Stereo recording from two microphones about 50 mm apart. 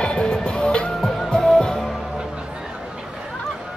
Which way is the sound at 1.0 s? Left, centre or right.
Centre.